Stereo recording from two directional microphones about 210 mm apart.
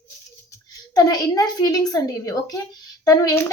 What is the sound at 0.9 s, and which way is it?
Speech, 15° left (ahead or behind).